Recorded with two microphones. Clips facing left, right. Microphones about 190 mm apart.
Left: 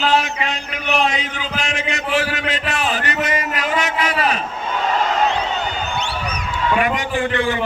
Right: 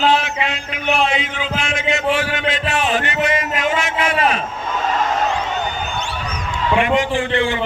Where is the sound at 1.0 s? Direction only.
40° left (ahead or behind).